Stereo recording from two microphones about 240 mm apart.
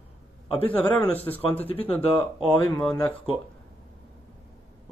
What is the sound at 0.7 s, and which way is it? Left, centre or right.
Speech, centre.